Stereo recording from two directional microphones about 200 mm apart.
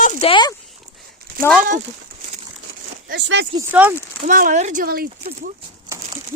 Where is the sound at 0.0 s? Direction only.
30° left (ahead or behind).